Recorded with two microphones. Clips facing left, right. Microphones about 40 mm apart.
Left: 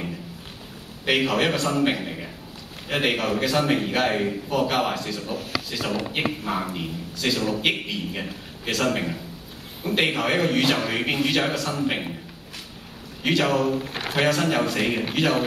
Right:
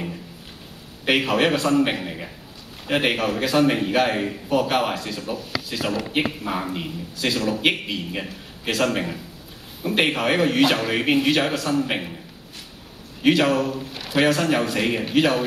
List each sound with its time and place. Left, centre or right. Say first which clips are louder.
1.0 s a man's voice: right 2 dB; centre
13.2 s a man's voice: right 4 dB; centre
13.8 s a sound: left 5 dB; left
14.1 s a man's voice: right 2 dB; centre